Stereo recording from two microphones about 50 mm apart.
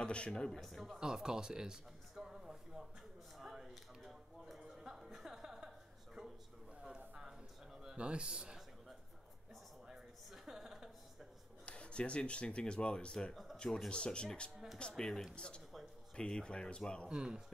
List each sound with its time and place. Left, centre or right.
0.0 s a man's voice: left
0.3 s a man's voice: centre
0.9 s a sound: centre
7.8 s a man's voice: centre
9.8 s a sound: centre
11.6 s speech: left
13.3 s a sound: centre
13.8 s speech: centre
17.1 s speech: centre